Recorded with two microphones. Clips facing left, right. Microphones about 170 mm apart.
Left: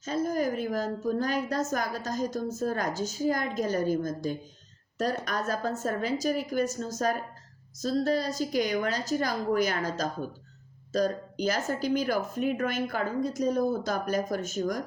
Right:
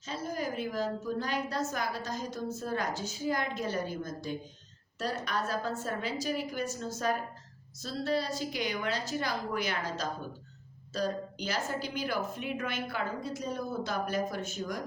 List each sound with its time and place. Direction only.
0.0 s a woman's voice: 45° left (ahead or behind)